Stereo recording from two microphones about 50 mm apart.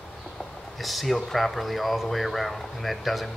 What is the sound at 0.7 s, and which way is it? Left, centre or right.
Speech, centre.